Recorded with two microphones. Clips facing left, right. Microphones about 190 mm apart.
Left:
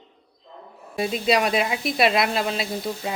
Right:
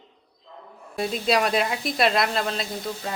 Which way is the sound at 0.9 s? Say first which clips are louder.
Left 2 dB; centre (ahead or behind).